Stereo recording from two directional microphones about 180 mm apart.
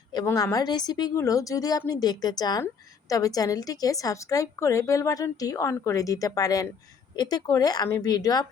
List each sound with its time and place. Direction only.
0.1 s a woman's voice: 20° left (ahead or behind)